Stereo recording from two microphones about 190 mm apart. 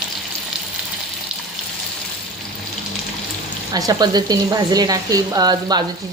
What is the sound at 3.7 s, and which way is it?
Speech, 20° right (ahead or behind).